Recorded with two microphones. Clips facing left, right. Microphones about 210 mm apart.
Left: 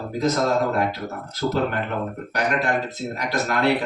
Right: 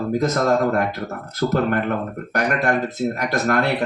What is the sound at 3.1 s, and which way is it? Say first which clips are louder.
Speech: right 1 dB; 55° right (ahead or behind).